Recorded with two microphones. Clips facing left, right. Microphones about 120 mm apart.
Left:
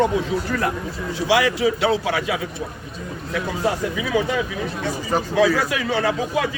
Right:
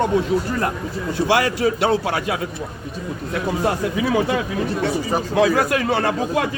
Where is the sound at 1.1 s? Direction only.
50° right (ahead or behind).